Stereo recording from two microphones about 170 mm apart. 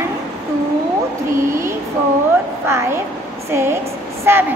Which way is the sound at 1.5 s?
15° right (ahead or behind).